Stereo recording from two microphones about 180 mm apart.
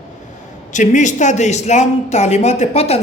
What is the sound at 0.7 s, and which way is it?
A woman's voice, 45° left (ahead or behind).